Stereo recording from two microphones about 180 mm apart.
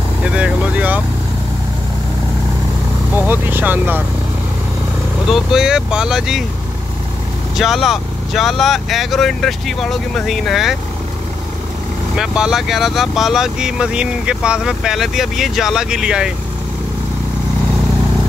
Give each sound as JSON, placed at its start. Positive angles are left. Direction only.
{"t": 0.2, "sound": "speech", "side_deg": -5}
{"t": 3.2, "sound": "speech", "side_deg": -10}
{"t": 5.3, "sound": "speech", "side_deg": -5}
{"t": 7.5, "sound": "speech", "side_deg": 0}
{"t": 12.2, "sound": "speech", "side_deg": -5}